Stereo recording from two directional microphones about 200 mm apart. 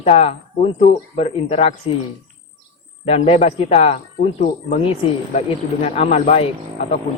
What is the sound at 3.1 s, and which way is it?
Speech, 30° left (ahead or behind).